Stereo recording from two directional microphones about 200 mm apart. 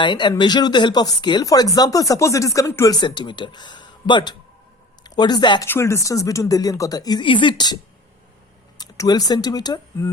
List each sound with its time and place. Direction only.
0.0 s speech: 25° left (ahead or behind)
8.8 s speech: 20° left (ahead or behind)